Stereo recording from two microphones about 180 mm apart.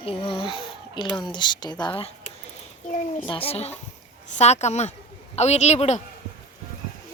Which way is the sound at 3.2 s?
30° left (ahead or behind).